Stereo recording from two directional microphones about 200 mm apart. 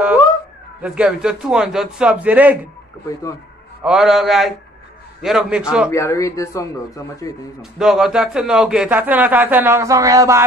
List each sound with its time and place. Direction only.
0.8 s a man's voice: 5° right (ahead or behind)
3.8 s a man's voice: centre (ahead or behind)
5.9 s speech: 15° left (ahead or behind)
7.8 s a man's voice: centre (ahead or behind)